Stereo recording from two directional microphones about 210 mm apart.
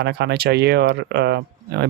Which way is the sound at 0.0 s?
55° right (ahead or behind).